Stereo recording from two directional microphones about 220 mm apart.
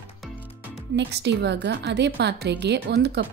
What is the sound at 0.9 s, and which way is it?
A woman's voice, 50° right (ahead or behind).